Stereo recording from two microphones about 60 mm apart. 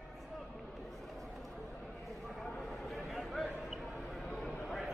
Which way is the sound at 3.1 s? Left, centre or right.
Centre.